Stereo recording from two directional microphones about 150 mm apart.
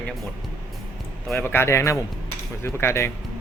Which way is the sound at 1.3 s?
10° left (ahead or behind).